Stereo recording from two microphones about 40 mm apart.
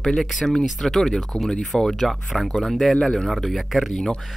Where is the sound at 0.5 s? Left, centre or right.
Centre.